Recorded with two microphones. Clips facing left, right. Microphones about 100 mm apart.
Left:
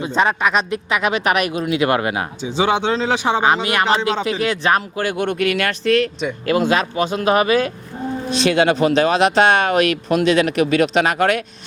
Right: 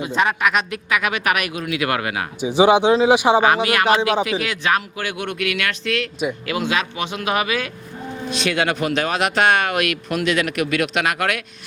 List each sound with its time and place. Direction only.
0.0 s speech: 30° left (ahead or behind)
2.4 s speech: 15° right (ahead or behind)
3.4 s speech: 25° left (ahead or behind)